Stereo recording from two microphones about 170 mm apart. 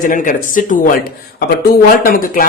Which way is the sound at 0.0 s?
55° left (ahead or behind).